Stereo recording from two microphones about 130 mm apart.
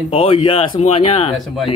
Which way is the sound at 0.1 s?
45° left (ahead or behind).